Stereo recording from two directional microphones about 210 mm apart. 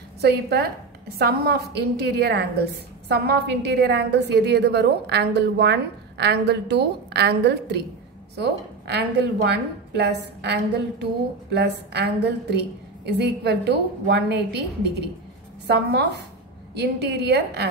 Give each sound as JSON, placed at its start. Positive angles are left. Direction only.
{"t": 0.2, "sound": "a woman's voice", "side_deg": -50}